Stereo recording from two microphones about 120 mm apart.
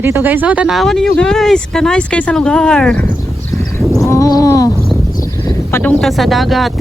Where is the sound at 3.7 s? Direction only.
25° left (ahead or behind).